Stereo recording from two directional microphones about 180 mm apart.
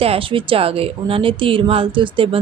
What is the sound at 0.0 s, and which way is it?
Speech, 30° right (ahead or behind).